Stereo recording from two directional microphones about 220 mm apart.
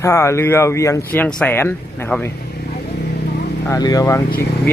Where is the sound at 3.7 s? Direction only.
15° left (ahead or behind).